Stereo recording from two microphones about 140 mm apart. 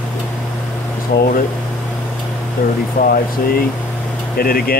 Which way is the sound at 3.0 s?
90° left.